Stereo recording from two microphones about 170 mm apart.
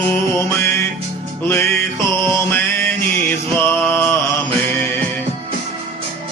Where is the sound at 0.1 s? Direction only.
15° left (ahead or behind).